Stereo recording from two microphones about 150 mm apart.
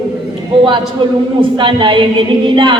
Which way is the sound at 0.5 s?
35° right (ahead or behind).